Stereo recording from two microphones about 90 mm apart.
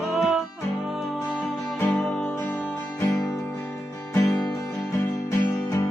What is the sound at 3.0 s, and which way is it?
Music, 40° left (ahead or behind).